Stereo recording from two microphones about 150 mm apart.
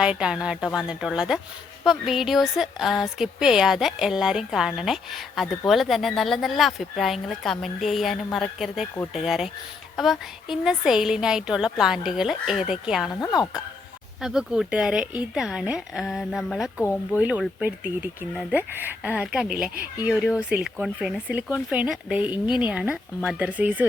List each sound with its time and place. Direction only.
0.0 s a woman's voice: 5° right (ahead or behind)
13.1 s speech: 25° left (ahead or behind)
14.2 s a woman's voice: 5° right (ahead or behind)